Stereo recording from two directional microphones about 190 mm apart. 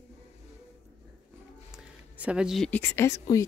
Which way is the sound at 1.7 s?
5° right (ahead or behind).